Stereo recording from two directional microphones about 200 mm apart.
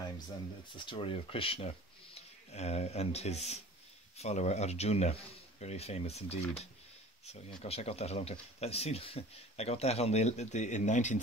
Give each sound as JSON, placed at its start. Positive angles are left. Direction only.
{"t": 0.7, "sound": "speech", "side_deg": 25}
{"t": 7.6, "sound": "speech", "side_deg": 30}